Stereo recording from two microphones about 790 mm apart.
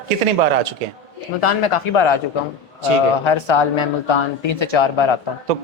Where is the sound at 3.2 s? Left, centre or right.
Left.